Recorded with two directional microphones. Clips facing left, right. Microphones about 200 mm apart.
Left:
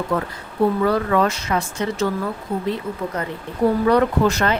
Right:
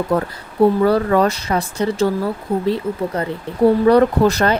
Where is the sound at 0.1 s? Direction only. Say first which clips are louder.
Right 4 dB; 40° right (ahead or behind).